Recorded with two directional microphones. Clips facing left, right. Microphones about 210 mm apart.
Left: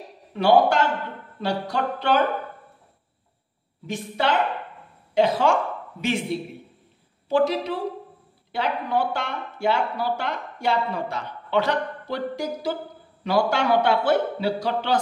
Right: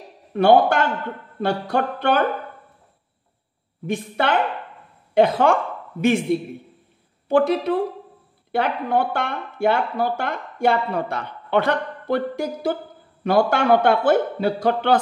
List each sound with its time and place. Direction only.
0.3 s speech: 55° right (ahead or behind)
3.8 s speech: 55° right (ahead or behind)
7.2 s a man's voice: 55° right (ahead or behind)